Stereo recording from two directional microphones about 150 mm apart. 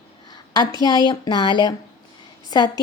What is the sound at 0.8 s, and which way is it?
A woman's voice, 30° left (ahead or behind).